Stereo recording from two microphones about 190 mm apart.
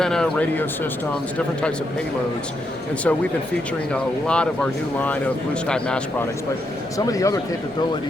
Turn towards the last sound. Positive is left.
turn(degrees=20)  # may be behind; listen again after turning